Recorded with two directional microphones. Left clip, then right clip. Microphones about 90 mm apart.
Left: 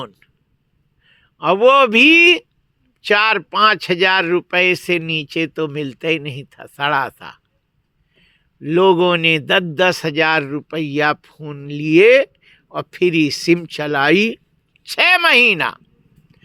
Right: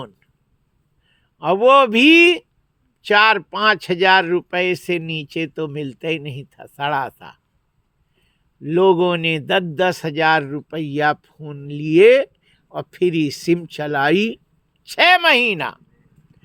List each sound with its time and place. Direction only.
0.0 s a man's voice: 45° right (ahead or behind)